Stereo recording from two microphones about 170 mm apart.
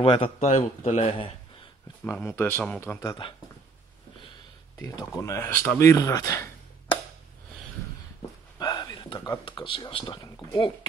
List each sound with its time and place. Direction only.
0.0 s speech: 35° left (ahead or behind)
2.0 s speech: 10° left (ahead or behind)
4.7 s speech: 20° left (ahead or behind)
8.5 s a sound: 25° left (ahead or behind)
9.4 s speech: 30° left (ahead or behind)